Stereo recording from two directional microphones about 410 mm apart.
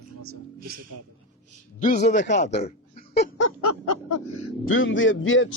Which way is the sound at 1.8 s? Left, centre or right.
Centre.